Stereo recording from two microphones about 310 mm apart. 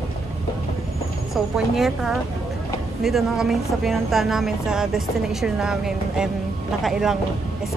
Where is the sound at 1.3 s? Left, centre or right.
Centre.